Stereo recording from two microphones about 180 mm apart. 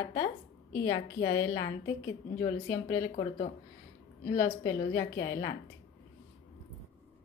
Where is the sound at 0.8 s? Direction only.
20° left (ahead or behind).